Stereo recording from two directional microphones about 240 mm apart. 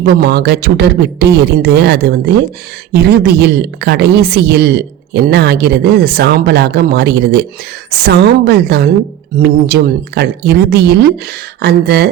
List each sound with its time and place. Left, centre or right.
0.0 s a woman's voice: right